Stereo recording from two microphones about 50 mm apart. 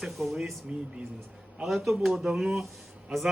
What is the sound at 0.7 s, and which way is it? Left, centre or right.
Speech, centre.